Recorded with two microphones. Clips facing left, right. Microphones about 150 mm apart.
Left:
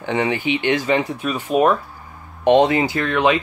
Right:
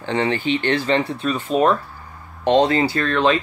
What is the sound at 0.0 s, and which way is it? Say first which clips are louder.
Speech: even; 15° left (ahead or behind).